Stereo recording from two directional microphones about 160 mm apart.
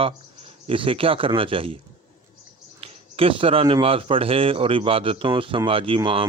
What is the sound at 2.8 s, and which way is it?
Speech, 35° right (ahead or behind).